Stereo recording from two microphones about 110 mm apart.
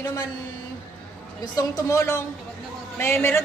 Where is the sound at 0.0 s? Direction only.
35° left (ahead or behind).